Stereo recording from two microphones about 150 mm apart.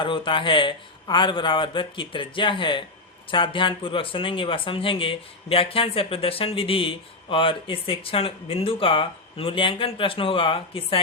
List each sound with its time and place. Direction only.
0.0 s speech: 35° left (ahead or behind)